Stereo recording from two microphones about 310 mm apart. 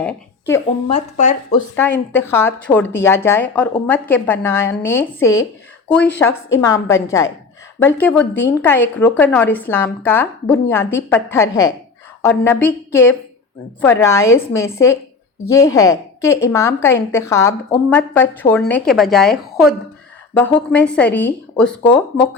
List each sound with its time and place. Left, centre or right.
0.0 s a woman's voice: centre
0.9 s speech: left
1.7 s a woman's voice: centre